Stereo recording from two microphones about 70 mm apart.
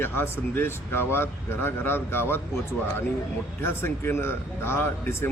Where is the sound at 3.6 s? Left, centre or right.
Left.